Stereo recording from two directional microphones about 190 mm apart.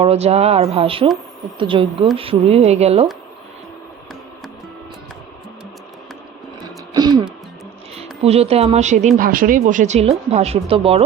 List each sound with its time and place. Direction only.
0.0 s speech: 35° right (ahead or behind)
6.6 s a sound: 20° right (ahead or behind)
8.2 s speech: 35° right (ahead or behind)